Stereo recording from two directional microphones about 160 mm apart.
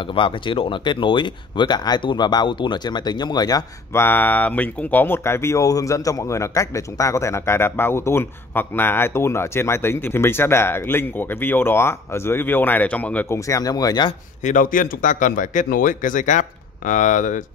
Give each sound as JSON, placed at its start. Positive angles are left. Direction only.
{"t": 0.1, "sound": "speech", "side_deg": 35}
{"t": 14.4, "sound": "speech", "side_deg": 55}